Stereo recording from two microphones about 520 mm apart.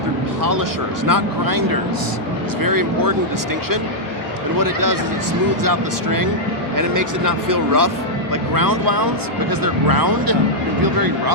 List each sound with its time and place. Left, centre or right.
1.0 s speech: right
4.6 s speech: right